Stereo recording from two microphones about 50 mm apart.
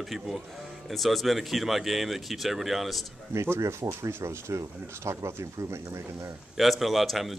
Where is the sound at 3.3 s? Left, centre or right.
Right.